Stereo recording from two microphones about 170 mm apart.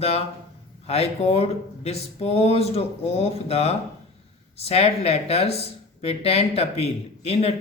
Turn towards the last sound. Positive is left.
turn(degrees=40)  # may be behind; listen again after turning